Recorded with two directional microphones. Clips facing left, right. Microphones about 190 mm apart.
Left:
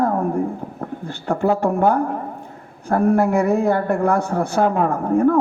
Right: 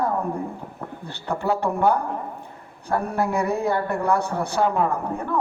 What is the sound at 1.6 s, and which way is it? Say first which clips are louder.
Speech: left 4 dB; 50° left (ahead or behind).